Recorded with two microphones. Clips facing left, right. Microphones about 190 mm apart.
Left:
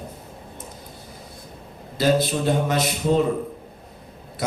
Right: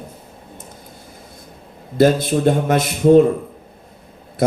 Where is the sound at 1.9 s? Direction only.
50° right (ahead or behind).